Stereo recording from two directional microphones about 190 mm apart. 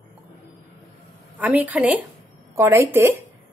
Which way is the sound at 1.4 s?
10° right (ahead or behind).